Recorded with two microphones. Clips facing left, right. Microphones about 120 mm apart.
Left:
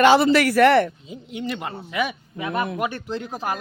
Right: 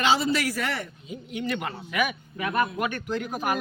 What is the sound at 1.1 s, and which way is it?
A man's voice, 25° left (ahead or behind).